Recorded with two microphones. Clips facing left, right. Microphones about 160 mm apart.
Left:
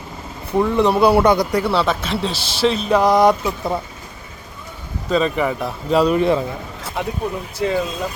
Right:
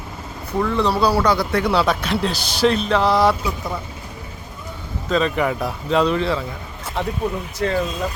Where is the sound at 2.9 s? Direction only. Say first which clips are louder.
Left 3 dB; 15° left (ahead or behind).